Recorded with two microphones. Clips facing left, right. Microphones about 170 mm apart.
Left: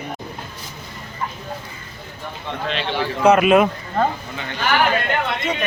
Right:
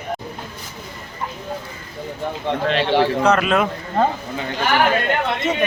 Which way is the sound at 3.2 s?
10° left (ahead or behind).